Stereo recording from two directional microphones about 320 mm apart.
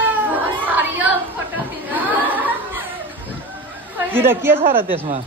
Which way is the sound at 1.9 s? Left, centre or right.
Centre.